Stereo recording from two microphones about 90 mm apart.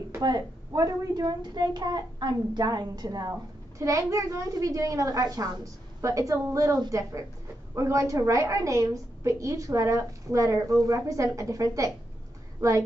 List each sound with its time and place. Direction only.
0.2 s a child's voice: 50° right (ahead or behind)